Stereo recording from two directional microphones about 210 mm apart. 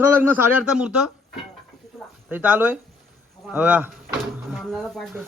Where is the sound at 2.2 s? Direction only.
5° right (ahead or behind).